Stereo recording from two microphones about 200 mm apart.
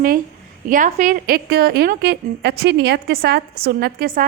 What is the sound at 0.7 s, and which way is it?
A woman's voice, 40° right (ahead or behind).